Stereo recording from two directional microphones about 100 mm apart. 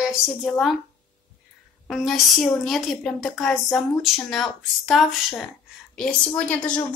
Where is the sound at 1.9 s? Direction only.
Centre (ahead or behind).